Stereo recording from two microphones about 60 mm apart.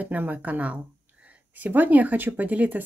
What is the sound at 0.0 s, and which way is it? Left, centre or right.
Speech, right.